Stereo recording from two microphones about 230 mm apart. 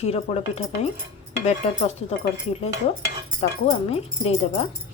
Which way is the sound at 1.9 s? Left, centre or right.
Left.